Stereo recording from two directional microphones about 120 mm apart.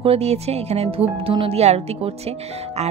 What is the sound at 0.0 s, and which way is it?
Speech, 60° right (ahead or behind).